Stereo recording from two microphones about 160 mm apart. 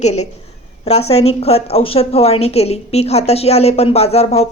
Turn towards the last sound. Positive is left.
turn(degrees=40)  # may be behind; listen again after turning